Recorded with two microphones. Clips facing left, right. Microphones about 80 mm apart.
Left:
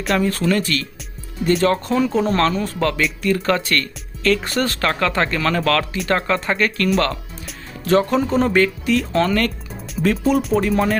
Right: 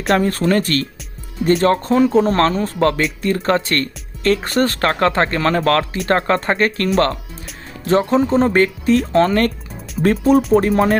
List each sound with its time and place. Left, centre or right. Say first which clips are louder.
0.1 s speech: right 3 dB; right